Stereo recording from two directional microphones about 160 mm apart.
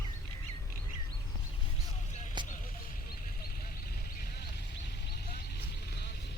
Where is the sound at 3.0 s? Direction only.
70° left (ahead or behind).